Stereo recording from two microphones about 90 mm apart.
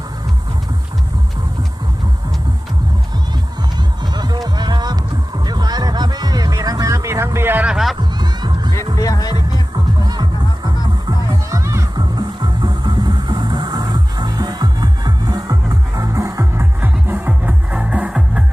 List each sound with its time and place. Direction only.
4.1 s music: 50° right (ahead or behind); by 7.3 s 30° right (ahead or behind)
7.3 s a sound: 20° right (ahead or behind)
7.7 s music: 5° right (ahead or behind)
8.2 s music: 55° right (ahead or behind)
9.0 s music: 40° left (ahead or behind)
10.0 s music: 50° right (ahead or behind)
11.5 s music: 35° right (ahead or behind)
11.9 s music: 50° right (ahead or behind); by 18.4 s 15° right (ahead or behind)